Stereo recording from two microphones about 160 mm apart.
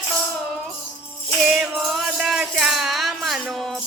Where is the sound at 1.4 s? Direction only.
5° right (ahead or behind).